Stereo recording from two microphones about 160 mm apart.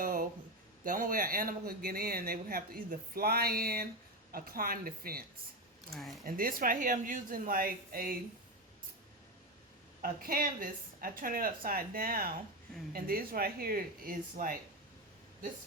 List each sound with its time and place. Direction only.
0.0 s a sound: 60° right (ahead or behind)
0.9 s speech: 60° right (ahead or behind)
5.9 s speech: centre (ahead or behind)
6.2 s speech: 60° right (ahead or behind)
10.0 s speech: 65° right (ahead or behind)